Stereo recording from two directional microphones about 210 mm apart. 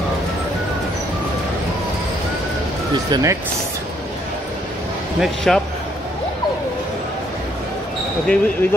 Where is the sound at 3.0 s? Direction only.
20° right (ahead or behind).